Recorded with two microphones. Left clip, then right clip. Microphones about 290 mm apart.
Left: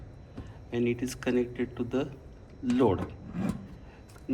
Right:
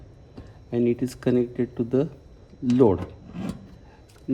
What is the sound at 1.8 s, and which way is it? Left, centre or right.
Speech, right.